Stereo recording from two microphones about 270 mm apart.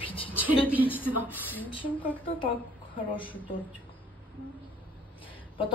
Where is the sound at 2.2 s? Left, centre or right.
Centre.